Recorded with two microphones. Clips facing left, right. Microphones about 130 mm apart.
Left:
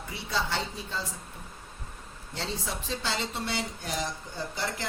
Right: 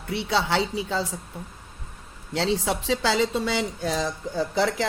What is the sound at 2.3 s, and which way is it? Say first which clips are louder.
Speech: right 11 dB; 85° right.